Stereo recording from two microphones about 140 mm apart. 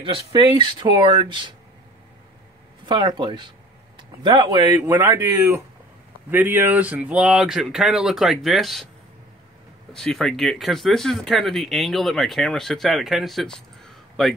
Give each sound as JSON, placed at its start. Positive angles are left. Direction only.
{"t": 0.0, "sound": "speech", "side_deg": -35}
{"t": 2.9, "sound": "speech", "side_deg": -35}
{"t": 9.9, "sound": "speech", "side_deg": 5}